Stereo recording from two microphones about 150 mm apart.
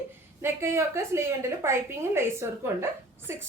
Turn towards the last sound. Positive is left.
turn(degrees=-15)  # may be behind; listen again after turning